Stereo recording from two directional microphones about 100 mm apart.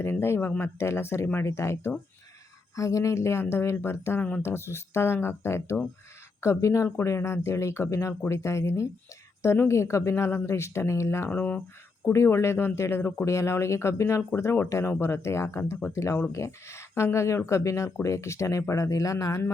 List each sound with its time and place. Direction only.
0.0 s speech: 25° left (ahead or behind)
11.3 s speech: 15° left (ahead or behind)
12.1 s speech: 30° left (ahead or behind)